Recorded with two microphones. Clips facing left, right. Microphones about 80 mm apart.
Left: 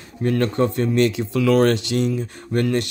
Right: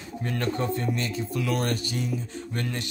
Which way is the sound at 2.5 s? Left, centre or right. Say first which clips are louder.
Left 12 dB; left.